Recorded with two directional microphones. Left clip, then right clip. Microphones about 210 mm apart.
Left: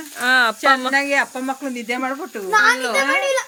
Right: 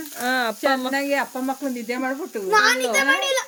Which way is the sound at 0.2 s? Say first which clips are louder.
Left 6 dB; 10° right (ahead or behind).